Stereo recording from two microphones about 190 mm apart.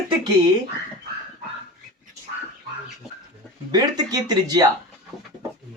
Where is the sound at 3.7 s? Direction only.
20° right (ahead or behind).